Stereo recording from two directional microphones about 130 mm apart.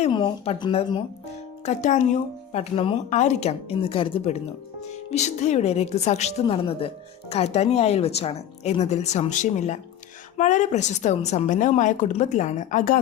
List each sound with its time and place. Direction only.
0.1 s a woman's voice: 35° left (ahead or behind)
1.6 s a woman's voice: 65° left (ahead or behind)
2.5 s a woman's voice: 50° left (ahead or behind); by 13.0 s 90° left